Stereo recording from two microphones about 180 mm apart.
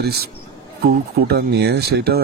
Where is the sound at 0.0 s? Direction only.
60° right (ahead or behind).